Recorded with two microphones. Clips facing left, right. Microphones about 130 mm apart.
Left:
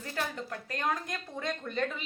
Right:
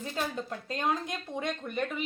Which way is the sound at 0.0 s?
20° right (ahead or behind).